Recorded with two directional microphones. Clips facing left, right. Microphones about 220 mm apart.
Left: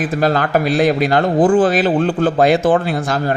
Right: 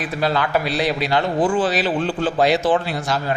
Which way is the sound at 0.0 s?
50° left (ahead or behind).